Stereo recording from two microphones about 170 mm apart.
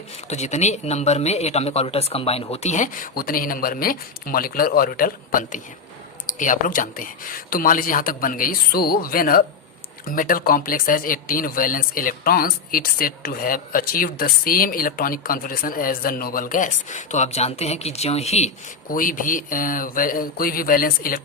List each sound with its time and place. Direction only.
0.3 s speech: 40° left (ahead or behind)
18.9 s speech: 55° left (ahead or behind)